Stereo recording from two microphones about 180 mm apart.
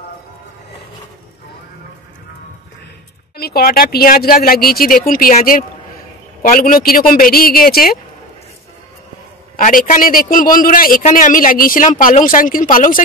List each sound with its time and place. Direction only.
3.3 s a man's voice: 60° left (ahead or behind)
9.6 s a man's voice: 50° left (ahead or behind)